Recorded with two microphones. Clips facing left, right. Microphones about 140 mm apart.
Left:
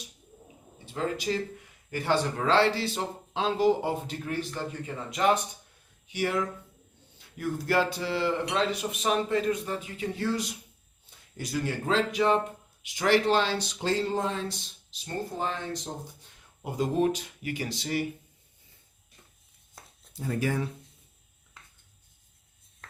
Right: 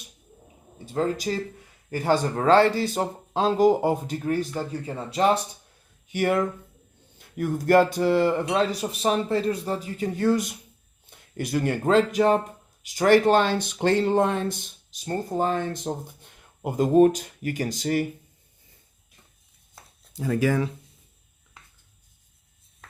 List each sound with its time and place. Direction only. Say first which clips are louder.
0.9 s speech: right 4 dB; 40° right (ahead or behind)
6.1 s speech: right 6 dB; 55° right (ahead or behind)
8.7 s speech: right 3 dB; 35° right (ahead or behind)
20.1 s speech: right 6 dB; 90° right